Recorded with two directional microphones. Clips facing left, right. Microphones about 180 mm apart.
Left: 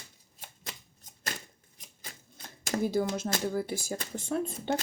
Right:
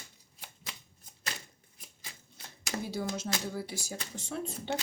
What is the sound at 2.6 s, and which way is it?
Speech, 50° left (ahead or behind).